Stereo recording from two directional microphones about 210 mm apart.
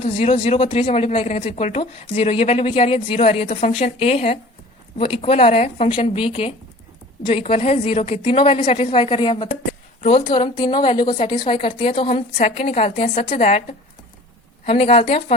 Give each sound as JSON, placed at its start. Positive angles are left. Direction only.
{"t": 0.0, "sound": "speech", "side_deg": 25}